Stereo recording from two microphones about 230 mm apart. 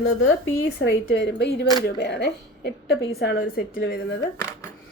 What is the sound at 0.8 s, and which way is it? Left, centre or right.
A woman's voice, left.